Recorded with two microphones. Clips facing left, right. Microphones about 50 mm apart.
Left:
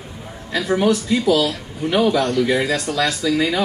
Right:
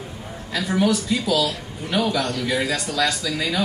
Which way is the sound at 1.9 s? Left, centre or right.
Left.